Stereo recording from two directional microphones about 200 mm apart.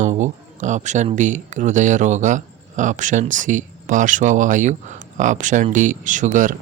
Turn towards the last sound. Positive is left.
turn(degrees=-40)  # may be behind; listen again after turning